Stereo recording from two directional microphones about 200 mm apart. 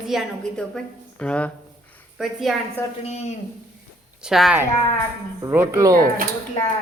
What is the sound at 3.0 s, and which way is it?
Speech, 35° left (ahead or behind).